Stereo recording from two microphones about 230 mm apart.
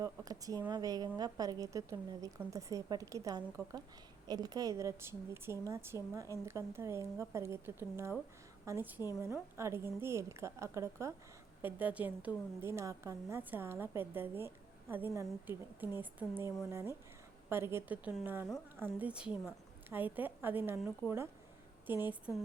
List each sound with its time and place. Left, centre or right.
0.0 s a woman's voice: centre